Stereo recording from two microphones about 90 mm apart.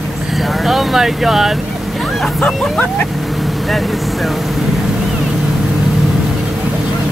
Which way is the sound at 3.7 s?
Centre (ahead or behind).